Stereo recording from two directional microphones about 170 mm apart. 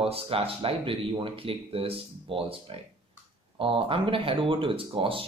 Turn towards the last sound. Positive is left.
turn(degrees=-30)  # may be behind; listen again after turning